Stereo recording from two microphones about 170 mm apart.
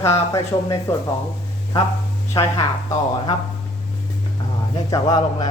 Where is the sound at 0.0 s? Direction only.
15° left (ahead or behind).